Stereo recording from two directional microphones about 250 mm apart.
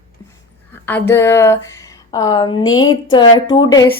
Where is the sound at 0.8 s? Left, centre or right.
Centre.